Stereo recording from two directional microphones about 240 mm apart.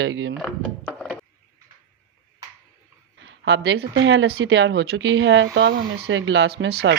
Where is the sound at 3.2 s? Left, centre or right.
Right.